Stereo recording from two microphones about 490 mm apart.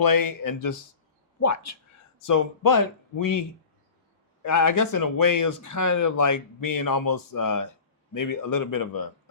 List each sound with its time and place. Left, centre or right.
0.0 s speech: left
4.4 s speech: left